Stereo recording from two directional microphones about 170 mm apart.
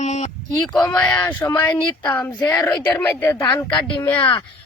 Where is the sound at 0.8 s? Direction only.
10° left (ahead or behind).